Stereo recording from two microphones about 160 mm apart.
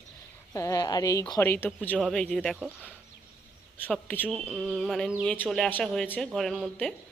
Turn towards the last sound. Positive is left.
turn(degrees=0)  # may be behind; listen again after turning